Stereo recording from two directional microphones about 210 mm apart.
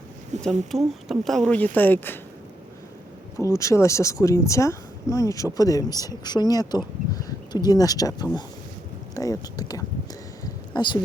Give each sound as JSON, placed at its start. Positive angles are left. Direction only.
{"t": 0.3, "sound": "speech", "side_deg": -35}
{"t": 0.7, "sound": "speech", "side_deg": 0}
{"t": 3.3, "sound": "speech", "side_deg": 15}
{"t": 10.4, "sound": "a sound", "side_deg": 20}